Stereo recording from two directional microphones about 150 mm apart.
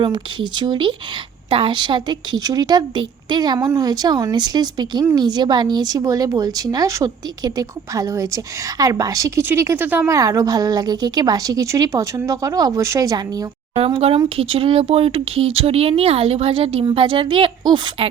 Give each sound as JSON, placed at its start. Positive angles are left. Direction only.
{"t": 0.0, "sound": "a woman's voice", "side_deg": -30}
{"t": 10.2, "sound": "a woman's voice", "side_deg": -20}
{"t": 13.7, "sound": "speech", "side_deg": -40}